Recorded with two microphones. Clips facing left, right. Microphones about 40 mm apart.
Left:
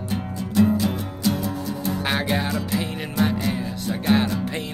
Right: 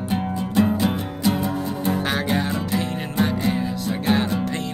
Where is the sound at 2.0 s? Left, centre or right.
Centre.